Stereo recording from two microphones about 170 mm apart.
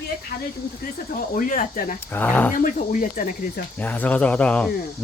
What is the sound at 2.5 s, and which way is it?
Speech, 50° left (ahead or behind).